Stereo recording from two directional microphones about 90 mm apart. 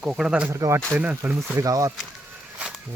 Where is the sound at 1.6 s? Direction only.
40° right (ahead or behind).